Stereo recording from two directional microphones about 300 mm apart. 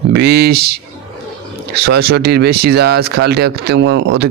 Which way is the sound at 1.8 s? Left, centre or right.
Right.